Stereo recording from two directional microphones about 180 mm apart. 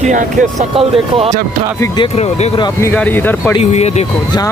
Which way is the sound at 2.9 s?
10° left (ahead or behind).